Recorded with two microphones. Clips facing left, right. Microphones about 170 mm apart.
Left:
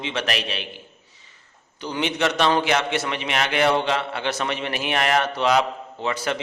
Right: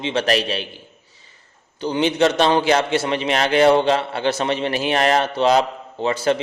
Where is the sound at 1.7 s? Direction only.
30° right (ahead or behind).